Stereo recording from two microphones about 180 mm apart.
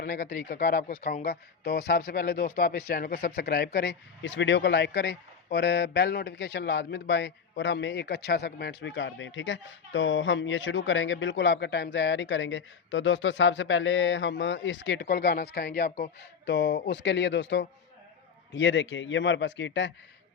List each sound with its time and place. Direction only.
0.0 s speech: 65° left (ahead or behind); by 15.0 s 90° left
15.0 s speech: 60° left (ahead or behind)
16.5 s a man's voice: 75° left (ahead or behind)